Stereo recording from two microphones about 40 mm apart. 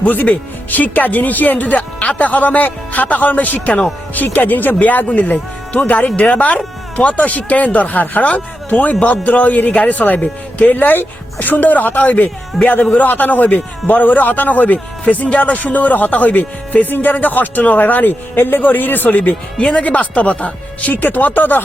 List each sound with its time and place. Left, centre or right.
0.0 s speech: left
10.8 s speech: left
19.5 s speech: left